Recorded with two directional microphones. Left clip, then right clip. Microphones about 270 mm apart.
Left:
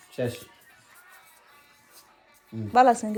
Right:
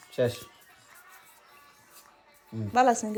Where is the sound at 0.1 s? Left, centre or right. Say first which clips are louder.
Right 3 dB; right.